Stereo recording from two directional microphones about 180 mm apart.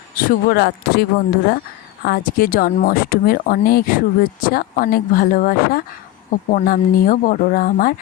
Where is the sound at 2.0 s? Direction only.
55° left (ahead or behind).